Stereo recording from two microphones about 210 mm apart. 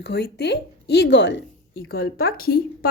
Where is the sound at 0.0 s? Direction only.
50° left (ahead or behind).